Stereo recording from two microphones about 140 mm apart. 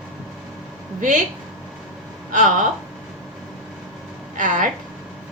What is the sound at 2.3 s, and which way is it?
Speech, 70° right (ahead or behind).